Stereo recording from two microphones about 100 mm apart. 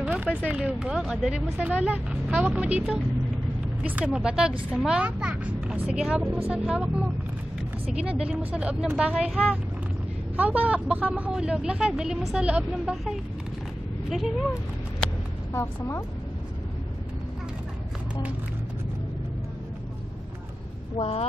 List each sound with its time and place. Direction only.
0.0 s speech: 10° right (ahead or behind)
15.5 s speech: 25° left (ahead or behind)
21.0 s speech: 90° left